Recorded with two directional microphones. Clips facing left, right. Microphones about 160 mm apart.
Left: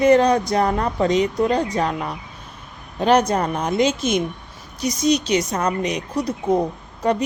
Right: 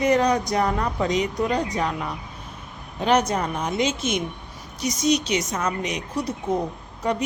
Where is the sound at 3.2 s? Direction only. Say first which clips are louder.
Left 4 dB; 55° left (ahead or behind).